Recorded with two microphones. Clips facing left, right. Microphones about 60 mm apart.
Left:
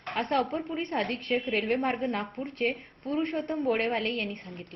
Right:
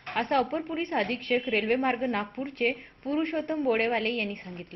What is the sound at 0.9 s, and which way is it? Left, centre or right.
Speech, right.